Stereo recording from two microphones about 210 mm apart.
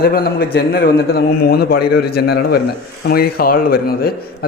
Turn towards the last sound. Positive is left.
turn(degrees=45)  # may be behind; listen again after turning